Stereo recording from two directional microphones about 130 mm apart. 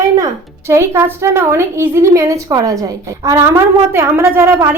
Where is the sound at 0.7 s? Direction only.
20° right (ahead or behind).